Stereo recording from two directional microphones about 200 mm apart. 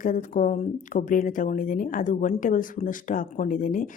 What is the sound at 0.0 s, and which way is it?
Speech, 40° left (ahead or behind).